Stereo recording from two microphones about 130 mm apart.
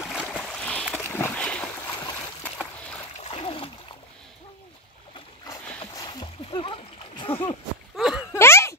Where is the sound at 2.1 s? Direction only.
15° left (ahead or behind).